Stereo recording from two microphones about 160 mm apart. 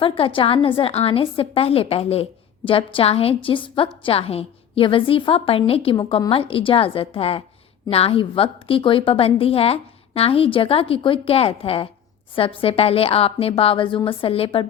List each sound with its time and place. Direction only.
0.0 s a woman's voice: 35° left (ahead or behind)